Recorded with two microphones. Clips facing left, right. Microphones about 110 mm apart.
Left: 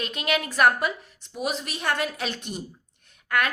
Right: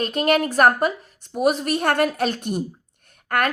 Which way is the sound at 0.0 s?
45° right (ahead or behind).